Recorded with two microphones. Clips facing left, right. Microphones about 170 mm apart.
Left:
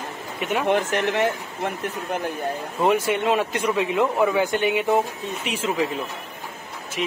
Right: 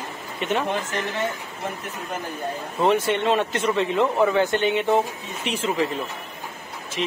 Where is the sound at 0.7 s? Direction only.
75° left (ahead or behind).